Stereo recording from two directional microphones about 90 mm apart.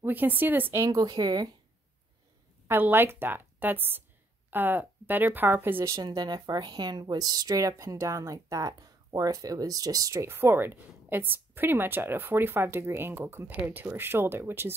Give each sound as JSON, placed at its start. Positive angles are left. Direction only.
{"t": 0.0, "sound": "a woman's voice", "side_deg": -20}
{"t": 0.8, "sound": "speech", "side_deg": -45}
{"t": 2.7, "sound": "a woman's voice", "side_deg": -25}
{"t": 5.9, "sound": "speech", "side_deg": -45}
{"t": 10.2, "sound": "a woman's voice", "side_deg": -25}